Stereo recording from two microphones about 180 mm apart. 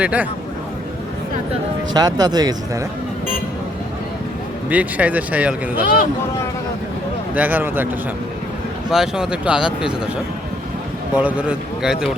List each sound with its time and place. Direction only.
0.0 s speech: 5° right (ahead or behind)
1.9 s speech: 20° right (ahead or behind)
4.7 s speech: 10° right (ahead or behind)
5.8 s speech: 55° left (ahead or behind)
7.3 s speech: 10° right (ahead or behind)
8.9 s speech: 5° right (ahead or behind)
11.2 s speech: 5° right (ahead or behind)